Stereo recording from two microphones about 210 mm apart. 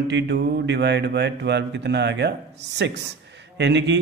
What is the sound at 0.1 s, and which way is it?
Speech, 55° right (ahead or behind).